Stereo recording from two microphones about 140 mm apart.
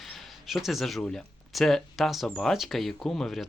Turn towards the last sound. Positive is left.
turn(degrees=5)  # may be behind; listen again after turning